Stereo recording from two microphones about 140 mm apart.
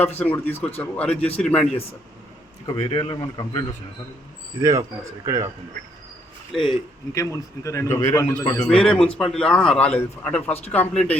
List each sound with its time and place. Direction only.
0.3 s a man's voice: 15° left (ahead or behind)
2.6 s speech: 30° left (ahead or behind)
4.6 s speech: 20° right (ahead or behind)
6.5 s speech: centre (ahead or behind)
7.1 s speech: 25° left (ahead or behind)
8.5 s a man's voice: 5° left (ahead or behind)